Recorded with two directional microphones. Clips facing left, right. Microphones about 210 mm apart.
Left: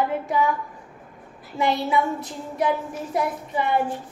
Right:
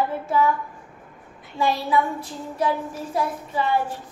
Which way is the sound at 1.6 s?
20° left (ahead or behind).